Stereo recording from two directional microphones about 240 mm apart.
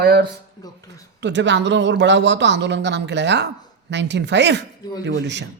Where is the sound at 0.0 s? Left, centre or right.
Right.